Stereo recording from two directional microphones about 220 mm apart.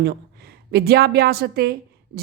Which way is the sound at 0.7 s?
45° right (ahead or behind).